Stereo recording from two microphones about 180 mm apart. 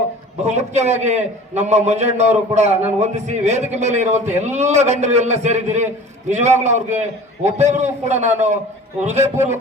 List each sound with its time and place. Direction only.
0.4 s a man's voice: 40° right (ahead or behind)